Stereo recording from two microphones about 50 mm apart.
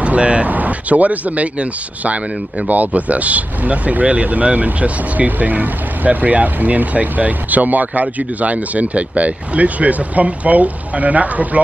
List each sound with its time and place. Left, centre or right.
0.0 s speech: right